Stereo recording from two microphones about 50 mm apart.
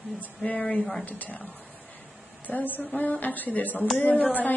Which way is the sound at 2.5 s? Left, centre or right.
Left.